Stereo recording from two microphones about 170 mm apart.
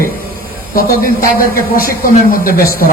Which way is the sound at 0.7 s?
60° left (ahead or behind).